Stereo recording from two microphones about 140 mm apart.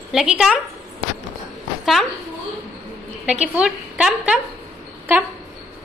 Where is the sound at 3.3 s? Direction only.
10° right (ahead or behind).